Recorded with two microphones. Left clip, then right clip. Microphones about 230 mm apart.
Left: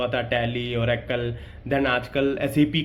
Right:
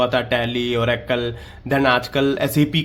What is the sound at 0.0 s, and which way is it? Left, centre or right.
A man's voice, right.